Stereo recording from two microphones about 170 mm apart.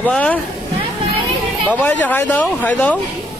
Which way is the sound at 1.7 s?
10° left (ahead or behind).